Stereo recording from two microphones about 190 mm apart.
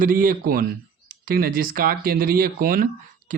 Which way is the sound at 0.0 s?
45° right (ahead or behind).